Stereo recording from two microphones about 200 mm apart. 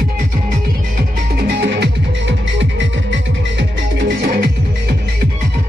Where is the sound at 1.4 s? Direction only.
55° right (ahead or behind).